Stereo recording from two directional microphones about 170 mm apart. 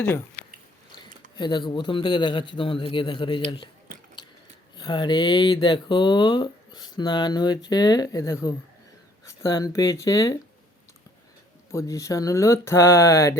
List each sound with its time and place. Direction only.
1.4 s speech: 25° left (ahead or behind)
4.8 s speech: 25° left (ahead or behind)
11.7 s speech: 20° left (ahead or behind)